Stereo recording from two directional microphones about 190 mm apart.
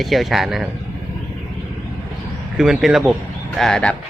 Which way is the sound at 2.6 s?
5° right (ahead or behind).